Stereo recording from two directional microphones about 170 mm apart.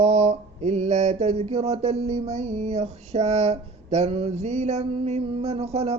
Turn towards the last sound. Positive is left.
turn(degrees=-35)  # may be behind; listen again after turning